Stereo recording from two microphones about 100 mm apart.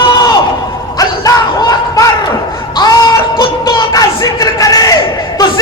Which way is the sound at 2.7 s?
45° left (ahead or behind).